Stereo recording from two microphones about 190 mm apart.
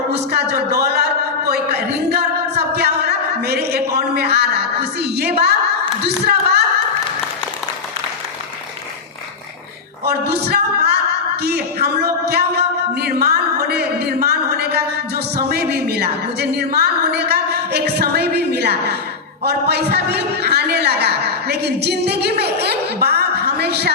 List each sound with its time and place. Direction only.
0.1 s speech: 60° right (ahead or behind)
1.5 s a sound: 55° right (ahead or behind)
6.1 s speech: 55° right (ahead or behind)
10.1 s speech: 60° right (ahead or behind)
11.4 s a sound: 60° right (ahead or behind)
19.5 s a man's voice: 60° right (ahead or behind)